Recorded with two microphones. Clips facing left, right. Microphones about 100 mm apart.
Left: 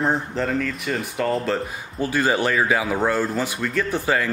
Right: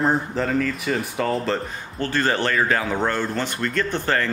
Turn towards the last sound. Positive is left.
turn(degrees=5)  # may be behind; listen again after turning